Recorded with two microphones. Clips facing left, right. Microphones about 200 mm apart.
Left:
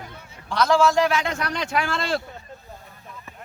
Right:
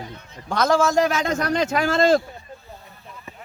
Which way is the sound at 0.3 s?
45° right (ahead or behind).